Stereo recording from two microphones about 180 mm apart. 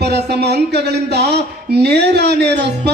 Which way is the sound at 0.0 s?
65° right (ahead or behind).